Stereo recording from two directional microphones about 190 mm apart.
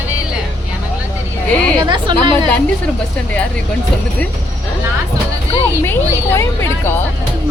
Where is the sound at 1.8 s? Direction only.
25° right (ahead or behind).